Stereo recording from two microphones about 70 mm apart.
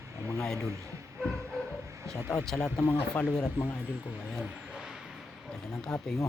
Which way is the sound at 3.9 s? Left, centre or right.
Right.